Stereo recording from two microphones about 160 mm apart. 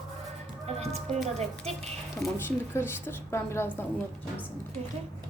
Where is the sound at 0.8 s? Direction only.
40° right (ahead or behind).